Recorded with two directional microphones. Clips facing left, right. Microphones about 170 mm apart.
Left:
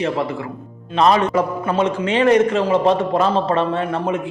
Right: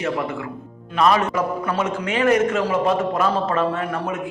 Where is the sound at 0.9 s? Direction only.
30° left (ahead or behind).